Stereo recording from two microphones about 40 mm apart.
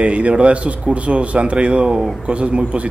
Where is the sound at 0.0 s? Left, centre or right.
Right.